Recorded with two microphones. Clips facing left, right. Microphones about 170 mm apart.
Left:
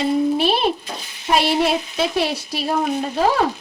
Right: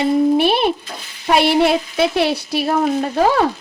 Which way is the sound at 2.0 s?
65° right (ahead or behind).